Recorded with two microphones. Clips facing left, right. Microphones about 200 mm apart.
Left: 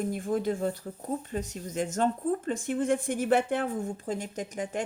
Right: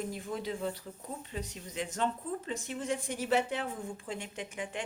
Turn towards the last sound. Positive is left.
turn(degrees=40)  # may be behind; listen again after turning